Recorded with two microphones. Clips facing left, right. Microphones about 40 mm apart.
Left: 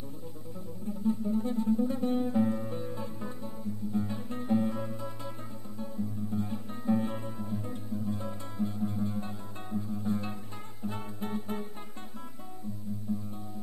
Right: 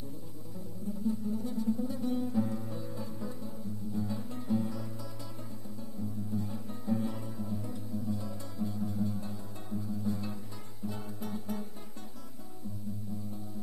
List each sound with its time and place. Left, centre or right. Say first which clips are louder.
1.0 s music: left 5 dB; left
6.3 s music: left 2 dB; left